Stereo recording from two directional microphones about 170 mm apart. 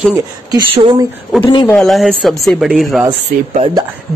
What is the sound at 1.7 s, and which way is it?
Speech, centre (ahead or behind).